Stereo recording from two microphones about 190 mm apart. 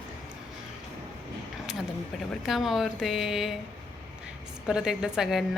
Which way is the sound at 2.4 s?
Centre (ahead or behind).